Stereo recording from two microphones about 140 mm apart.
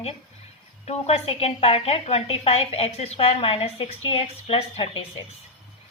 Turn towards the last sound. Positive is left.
turn(degrees=45)  # may be behind; listen again after turning